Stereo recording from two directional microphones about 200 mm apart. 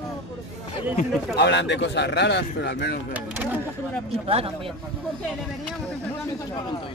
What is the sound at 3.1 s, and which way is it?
Speech, 10° right (ahead or behind).